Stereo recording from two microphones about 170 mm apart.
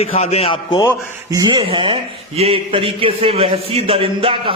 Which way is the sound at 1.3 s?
25° right (ahead or behind).